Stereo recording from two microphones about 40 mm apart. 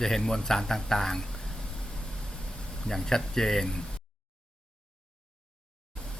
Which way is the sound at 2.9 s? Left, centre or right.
Centre.